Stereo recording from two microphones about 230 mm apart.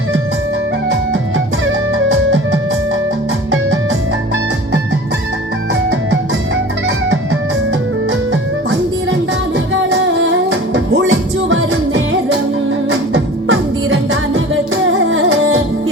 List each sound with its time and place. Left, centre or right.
2.0 s music: right
8.3 s music: right